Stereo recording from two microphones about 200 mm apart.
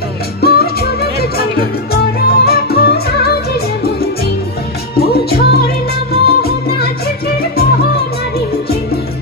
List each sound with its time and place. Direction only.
0.4 s music: 50° left (ahead or behind)
2.1 s music: 50° left (ahead or behind)
4.9 s music: 50° left (ahead or behind)